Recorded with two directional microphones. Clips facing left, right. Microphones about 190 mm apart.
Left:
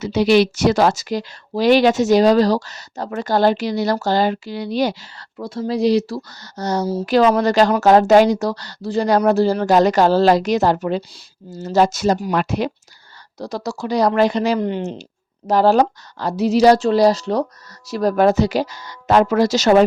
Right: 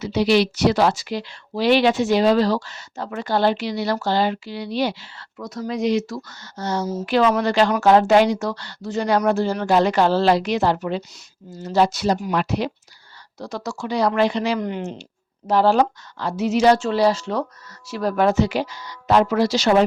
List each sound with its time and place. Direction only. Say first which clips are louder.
0.0 s speech: left 3 dB; 50° left (ahead or behind)
13.4 s speech: left 3 dB; 35° left (ahead or behind)